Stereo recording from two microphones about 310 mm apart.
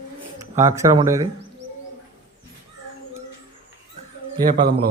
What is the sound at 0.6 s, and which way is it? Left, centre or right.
Speech, centre.